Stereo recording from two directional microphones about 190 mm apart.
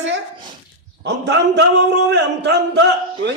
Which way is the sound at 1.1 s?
60° right (ahead or behind).